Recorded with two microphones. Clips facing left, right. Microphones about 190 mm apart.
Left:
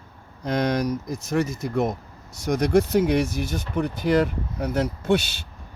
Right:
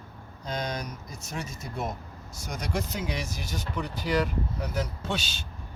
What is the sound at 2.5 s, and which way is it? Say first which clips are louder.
Speech: left 13 dB; 65° left (ahead or behind).